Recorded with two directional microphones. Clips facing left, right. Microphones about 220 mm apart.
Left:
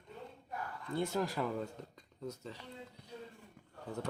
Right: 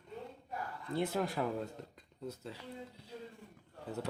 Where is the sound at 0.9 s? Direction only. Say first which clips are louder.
Right 1 dB; centre (ahead or behind).